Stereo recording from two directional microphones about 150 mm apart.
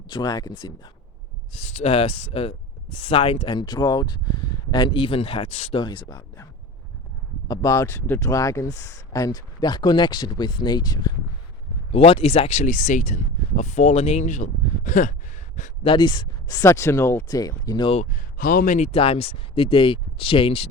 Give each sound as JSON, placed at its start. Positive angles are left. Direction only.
{"t": 0.1, "sound": "speech", "side_deg": 25}
{"t": 1.7, "sound": "speech", "side_deg": 45}
{"t": 11.9, "sound": "speech", "side_deg": 40}
{"t": 15.5, "sound": "a sound", "side_deg": 55}
{"t": 15.9, "sound": "speech", "side_deg": 30}
{"t": 17.9, "sound": "speech", "side_deg": 55}
{"t": 18.9, "sound": "speech", "side_deg": 40}